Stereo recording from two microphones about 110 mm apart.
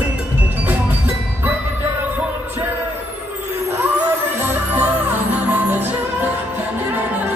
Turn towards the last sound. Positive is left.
turn(degrees=-15)  # may be behind; listen again after turning